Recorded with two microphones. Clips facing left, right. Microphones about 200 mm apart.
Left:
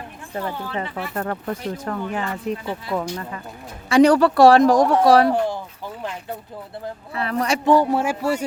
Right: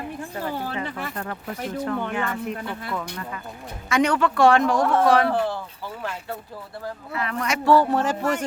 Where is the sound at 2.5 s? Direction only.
35° left (ahead or behind).